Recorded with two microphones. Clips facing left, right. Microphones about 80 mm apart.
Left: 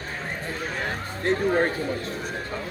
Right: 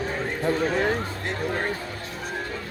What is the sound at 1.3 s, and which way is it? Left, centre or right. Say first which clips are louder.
Speech: left 10 dB; left.